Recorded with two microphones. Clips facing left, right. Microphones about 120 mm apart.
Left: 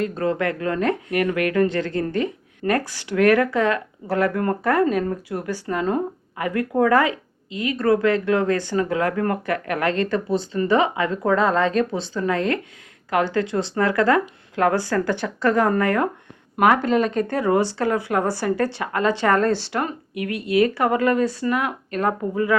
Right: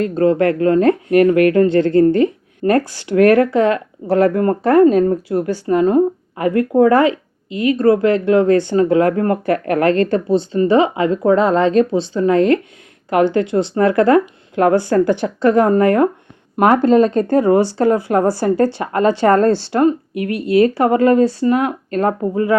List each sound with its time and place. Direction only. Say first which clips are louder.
0.0 s a woman's voice: right 8 dB; 35° right (ahead or behind)